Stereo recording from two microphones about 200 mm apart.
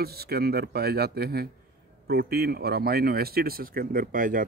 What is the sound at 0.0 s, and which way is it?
Speech, 50° right (ahead or behind).